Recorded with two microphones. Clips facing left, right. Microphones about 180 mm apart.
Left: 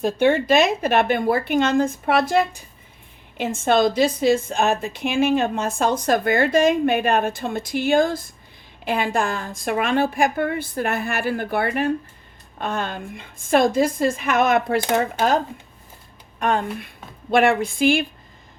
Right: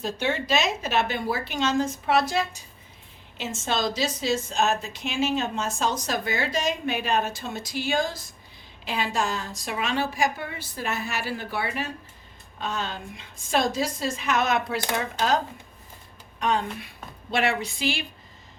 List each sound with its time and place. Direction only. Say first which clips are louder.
0.0 s a woman's voice: left 9 dB; 55° left (ahead or behind)
16.4 s a woman's voice: left 4 dB; 55° left (ahead or behind)